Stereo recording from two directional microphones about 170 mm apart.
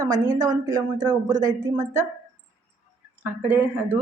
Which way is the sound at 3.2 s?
10° right (ahead or behind).